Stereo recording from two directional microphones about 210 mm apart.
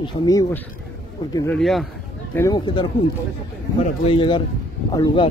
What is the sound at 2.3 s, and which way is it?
Speech, 15° left (ahead or behind).